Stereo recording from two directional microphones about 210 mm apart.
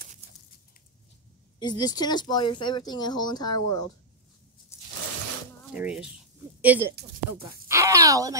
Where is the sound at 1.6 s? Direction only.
20° left (ahead or behind).